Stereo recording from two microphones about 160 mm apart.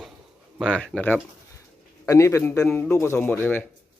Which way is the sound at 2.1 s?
20° left (ahead or behind).